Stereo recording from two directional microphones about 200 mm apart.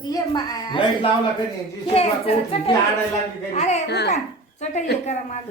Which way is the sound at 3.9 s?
55° left (ahead or behind).